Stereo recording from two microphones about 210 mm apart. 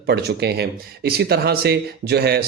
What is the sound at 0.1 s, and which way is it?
Speech, 50° right (ahead or behind).